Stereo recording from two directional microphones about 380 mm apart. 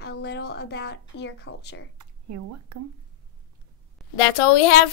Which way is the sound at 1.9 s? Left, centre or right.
Right.